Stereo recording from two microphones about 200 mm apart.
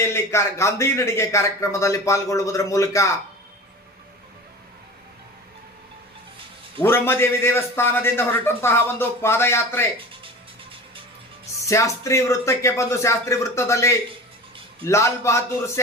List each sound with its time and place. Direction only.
0.0 s a man's voice: 15° left (ahead or behind)
6.7 s a man's voice: 10° left (ahead or behind)
11.6 s a man's voice: 15° left (ahead or behind)